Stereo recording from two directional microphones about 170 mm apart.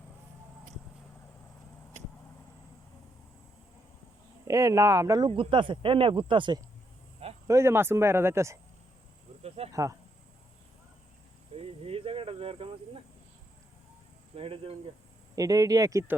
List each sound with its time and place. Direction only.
4.4 s speech: 20° right (ahead or behind)
5.3 s speech: 30° right (ahead or behind)
7.4 s speech: 15° right (ahead or behind)
9.7 s speech: 20° right (ahead or behind)
11.5 s speech: 35° right (ahead or behind)
14.3 s speech: 35° right (ahead or behind)
15.4 s speech: 20° right (ahead or behind)